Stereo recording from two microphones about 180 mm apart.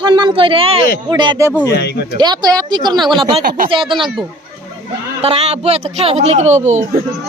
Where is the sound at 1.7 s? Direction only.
65° left (ahead or behind).